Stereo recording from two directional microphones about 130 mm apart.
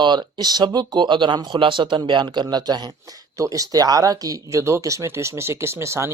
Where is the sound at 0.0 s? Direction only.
35° right (ahead or behind).